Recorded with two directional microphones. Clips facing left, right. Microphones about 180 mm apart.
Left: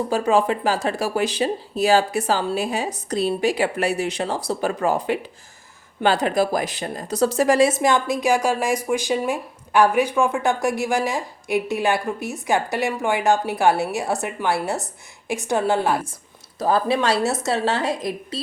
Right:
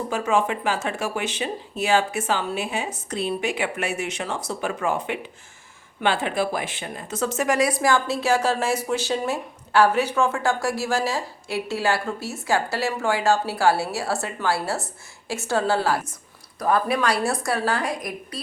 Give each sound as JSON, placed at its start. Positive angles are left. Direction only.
{"t": 0.1, "sound": "a woman's voice", "side_deg": 35}